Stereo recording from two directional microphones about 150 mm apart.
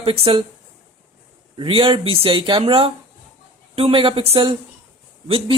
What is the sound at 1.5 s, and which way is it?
Speech, 35° right (ahead or behind).